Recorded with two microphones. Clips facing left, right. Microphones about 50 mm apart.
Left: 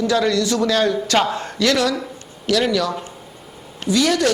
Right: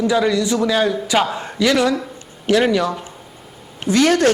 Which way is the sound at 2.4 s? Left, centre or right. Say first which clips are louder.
Right 3 dB; right.